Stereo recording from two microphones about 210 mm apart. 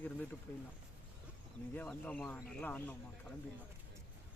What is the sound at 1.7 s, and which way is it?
Speech, 5° left (ahead or behind).